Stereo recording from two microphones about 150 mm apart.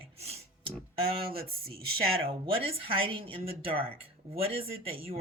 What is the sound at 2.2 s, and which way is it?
Speech, 40° right (ahead or behind).